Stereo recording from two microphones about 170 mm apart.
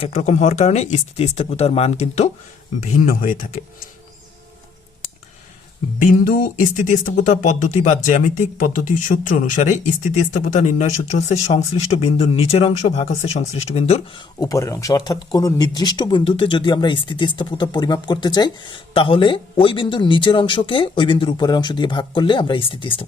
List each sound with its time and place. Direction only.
0.0 s speech: 40° left (ahead or behind)
6.7 s speech: 45° left (ahead or behind)
14.3 s speech: 20° left (ahead or behind)